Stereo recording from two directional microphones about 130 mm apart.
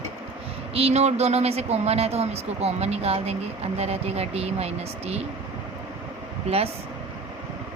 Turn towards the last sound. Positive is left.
turn(degrees=-55)  # may be behind; listen again after turning